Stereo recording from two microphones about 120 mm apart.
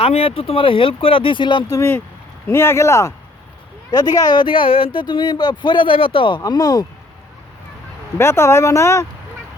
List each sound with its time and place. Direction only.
0.0 s speech: 50° left (ahead or behind)
1.7 s speech: 20° left (ahead or behind); by 6.4 s 45° left (ahead or behind)
6.4 s speech: 30° left (ahead or behind)
8.2 s speech: 20° left (ahead or behind)